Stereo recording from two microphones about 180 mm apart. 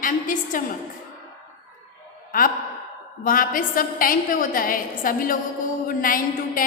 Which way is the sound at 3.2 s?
50° left (ahead or behind).